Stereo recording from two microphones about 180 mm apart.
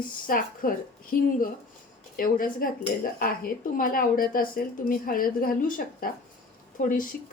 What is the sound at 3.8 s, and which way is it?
A woman's voice, 50° left (ahead or behind).